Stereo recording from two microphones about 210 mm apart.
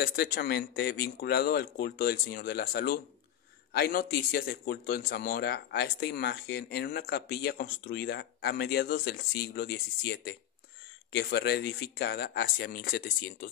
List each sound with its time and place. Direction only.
0.0 s a man's voice: 50° left (ahead or behind)